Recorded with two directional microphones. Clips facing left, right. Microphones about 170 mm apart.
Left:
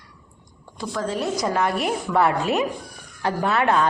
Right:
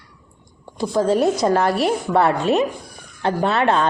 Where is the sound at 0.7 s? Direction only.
30° right (ahead or behind).